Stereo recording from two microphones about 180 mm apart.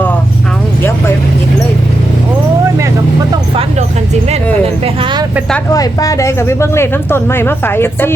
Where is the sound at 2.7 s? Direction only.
15° right (ahead or behind).